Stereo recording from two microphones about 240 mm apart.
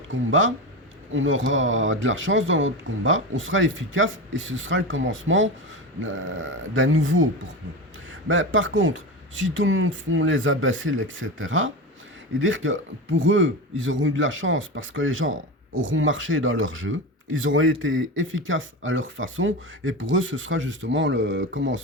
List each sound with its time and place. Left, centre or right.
0.1 s a man's voice: right
8.3 s a man's voice: right